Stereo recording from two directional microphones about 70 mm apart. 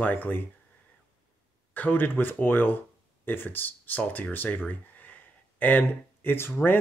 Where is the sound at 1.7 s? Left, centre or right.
Left.